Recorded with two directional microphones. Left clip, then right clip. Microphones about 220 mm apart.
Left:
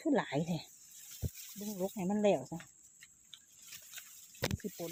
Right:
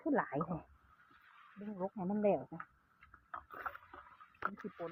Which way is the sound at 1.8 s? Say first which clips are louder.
Left 3 dB; 45° left (ahead or behind).